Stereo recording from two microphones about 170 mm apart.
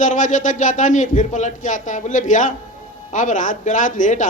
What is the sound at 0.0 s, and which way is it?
A man's voice, 50° left (ahead or behind).